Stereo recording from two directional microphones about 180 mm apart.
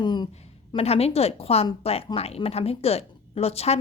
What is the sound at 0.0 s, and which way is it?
Speech, 25° left (ahead or behind).